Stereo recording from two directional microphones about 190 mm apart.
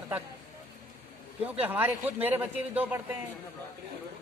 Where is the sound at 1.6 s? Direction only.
10° right (ahead or behind).